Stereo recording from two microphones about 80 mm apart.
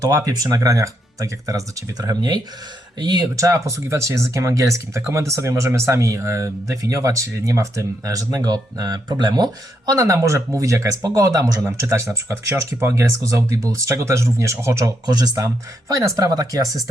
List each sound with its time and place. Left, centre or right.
0.0 s speech: right
3.3 s speech: right
11.6 s speech: right
15.0 s speech: right
15.4 s speech: right